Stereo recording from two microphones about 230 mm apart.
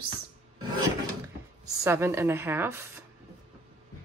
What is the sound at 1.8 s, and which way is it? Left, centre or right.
Speech, centre.